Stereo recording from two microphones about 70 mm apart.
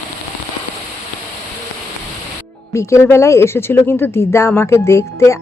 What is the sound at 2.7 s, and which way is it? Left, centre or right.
A woman's voice, left.